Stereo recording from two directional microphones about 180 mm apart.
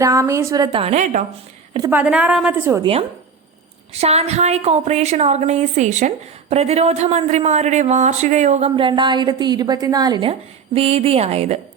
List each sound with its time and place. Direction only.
0.0 s a woman's voice: 15° right (ahead or behind); by 1.2 s 40° right (ahead or behind)
1.9 s a woman's voice: 10° right (ahead or behind)
3.9 s a woman's voice: 35° right (ahead or behind)